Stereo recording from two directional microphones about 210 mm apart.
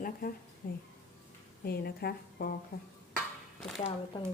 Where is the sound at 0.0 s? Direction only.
45° left (ahead or behind).